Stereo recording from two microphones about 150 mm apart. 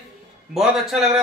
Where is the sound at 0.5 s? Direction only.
5° right (ahead or behind).